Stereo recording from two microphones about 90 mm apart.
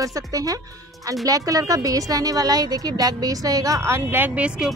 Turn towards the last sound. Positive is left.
turn(degrees=-10)  # may be behind; listen again after turning